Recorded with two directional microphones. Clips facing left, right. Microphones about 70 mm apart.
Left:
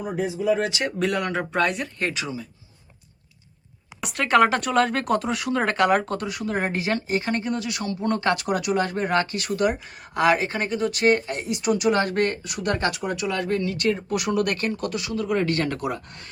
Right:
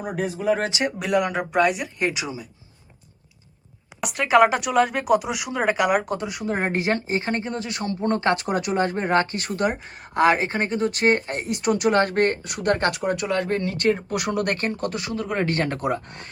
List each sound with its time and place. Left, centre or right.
0.0 s speech: right
0.7 s speech: centre
1.0 s speech: centre
4.0 s speech: centre; by 16.3 s right